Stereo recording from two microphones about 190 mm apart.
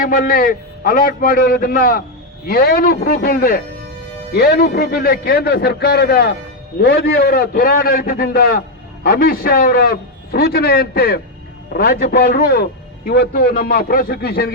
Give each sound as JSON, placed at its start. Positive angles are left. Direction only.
{"t": 0.0, "sound": "a man's voice", "side_deg": 50}